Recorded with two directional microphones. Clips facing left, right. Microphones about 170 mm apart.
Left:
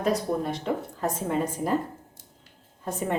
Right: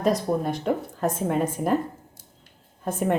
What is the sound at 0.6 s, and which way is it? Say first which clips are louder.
Speech: right 3 dB; 55° right (ahead or behind).